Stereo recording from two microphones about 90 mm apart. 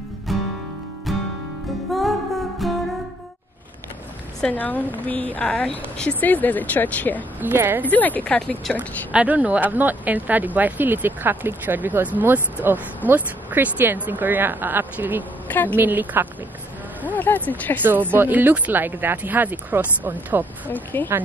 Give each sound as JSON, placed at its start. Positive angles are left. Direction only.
{"t": 0.3, "sound": "music", "side_deg": 0}
{"t": 4.4, "sound": "a woman's voice", "side_deg": 15}
{"t": 7.3, "sound": "speech", "side_deg": -20}
{"t": 7.8, "sound": "speech", "side_deg": 20}
{"t": 8.7, "sound": "speech", "side_deg": -15}
{"t": 15.4, "sound": "a woman's voice", "side_deg": 20}
{"t": 15.7, "sound": "speech", "side_deg": -20}
{"t": 17.0, "sound": "a woman's voice", "side_deg": 20}
{"t": 18.1, "sound": "speech", "side_deg": -20}
{"t": 20.6, "sound": "a woman's voice", "side_deg": 20}